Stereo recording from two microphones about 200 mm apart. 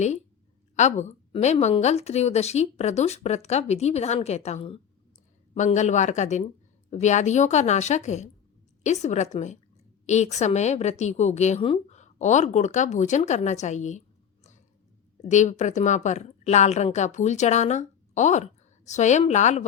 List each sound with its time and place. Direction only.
0.8 s a woman's voice: 35° left (ahead or behind)
15.3 s a woman's voice: 35° left (ahead or behind)